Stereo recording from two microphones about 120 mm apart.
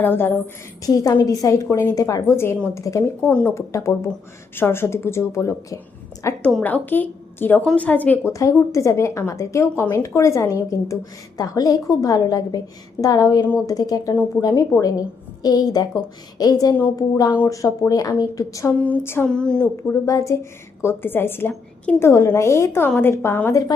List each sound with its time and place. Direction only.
0.0 s a woman's voice: 20° left (ahead or behind)
1.2 s a woman's voice: 30° left (ahead or behind)
3.2 s a woman's voice: 10° left (ahead or behind)
3.5 s a woman's voice: 25° left (ahead or behind)
18.8 s a woman's voice: 15° left (ahead or behind)
19.7 s a woman's voice: 25° left (ahead or behind)